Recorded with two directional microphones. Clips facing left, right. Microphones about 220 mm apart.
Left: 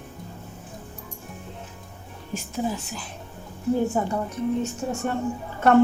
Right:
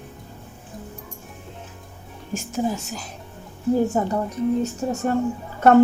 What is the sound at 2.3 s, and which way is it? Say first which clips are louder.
A woman's voice: right 3 dB; 45° right (ahead or behind).